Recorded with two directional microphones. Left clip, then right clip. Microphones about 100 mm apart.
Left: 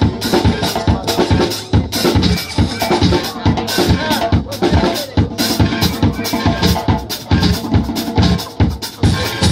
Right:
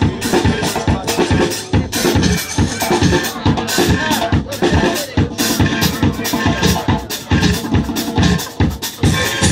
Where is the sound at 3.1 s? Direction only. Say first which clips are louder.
Even; 15° left (ahead or behind).